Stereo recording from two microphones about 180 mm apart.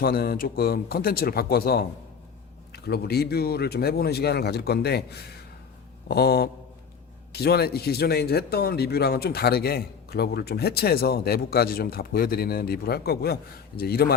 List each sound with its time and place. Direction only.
0.0 s speech: 55° left (ahead or behind)
6.1 s speech: 65° left (ahead or behind)